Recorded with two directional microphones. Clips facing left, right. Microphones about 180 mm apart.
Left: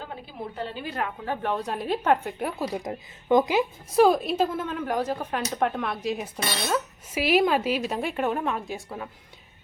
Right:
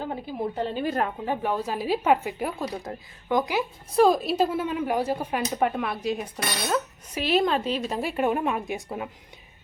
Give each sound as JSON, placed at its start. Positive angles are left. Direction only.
{"t": 0.0, "sound": "a woman's voice", "side_deg": -40}
{"t": 1.2, "sound": "speech", "side_deg": -10}
{"t": 2.7, "sound": "speech", "side_deg": 15}
{"t": 3.9, "sound": "a woman's voice", "side_deg": 0}